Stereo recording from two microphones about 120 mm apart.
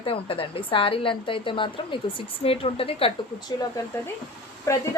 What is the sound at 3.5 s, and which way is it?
Speech, 35° left (ahead or behind).